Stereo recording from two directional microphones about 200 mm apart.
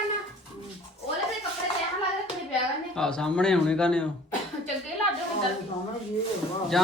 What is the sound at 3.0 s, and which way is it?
A man's voice, 5° left (ahead or behind).